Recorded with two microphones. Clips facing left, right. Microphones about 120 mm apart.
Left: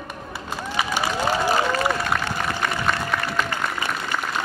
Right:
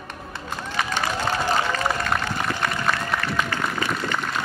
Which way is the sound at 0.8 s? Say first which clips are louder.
Left 2 dB; 10° left (ahead or behind).